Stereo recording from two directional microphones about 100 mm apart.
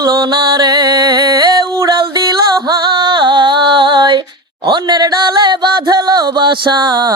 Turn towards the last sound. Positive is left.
turn(degrees=-45)  # may be behind; listen again after turning